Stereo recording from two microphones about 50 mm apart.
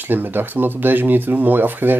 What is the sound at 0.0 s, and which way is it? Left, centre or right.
Speech, right.